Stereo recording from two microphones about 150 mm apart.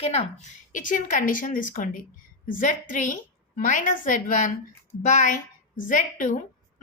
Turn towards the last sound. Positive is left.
turn(degrees=60)  # may be behind; listen again after turning